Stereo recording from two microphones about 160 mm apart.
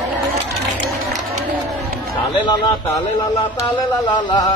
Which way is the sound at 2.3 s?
30° left (ahead or behind).